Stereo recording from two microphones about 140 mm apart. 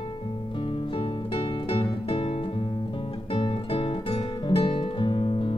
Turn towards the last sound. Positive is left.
turn(degrees=35)  # may be behind; listen again after turning